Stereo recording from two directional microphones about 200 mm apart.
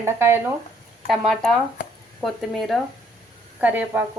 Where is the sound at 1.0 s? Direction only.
Centre (ahead or behind).